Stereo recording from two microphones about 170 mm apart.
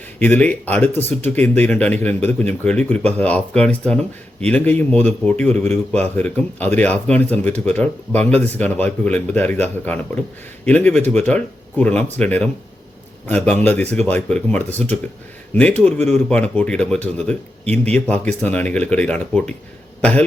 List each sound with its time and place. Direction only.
0.2 s a man's voice: 10° left (ahead or behind)